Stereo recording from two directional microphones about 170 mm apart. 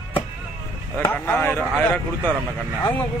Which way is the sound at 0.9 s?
10° left (ahead or behind).